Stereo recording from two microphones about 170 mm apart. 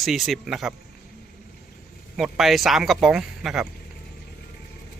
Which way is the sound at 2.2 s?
Centre (ahead or behind).